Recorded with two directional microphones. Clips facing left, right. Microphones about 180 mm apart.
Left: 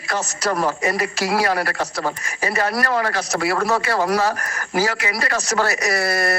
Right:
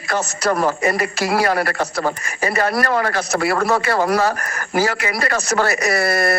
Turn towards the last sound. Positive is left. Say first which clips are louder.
# right 3 dB
turn(degrees=-55)  # may be behind; listen again after turning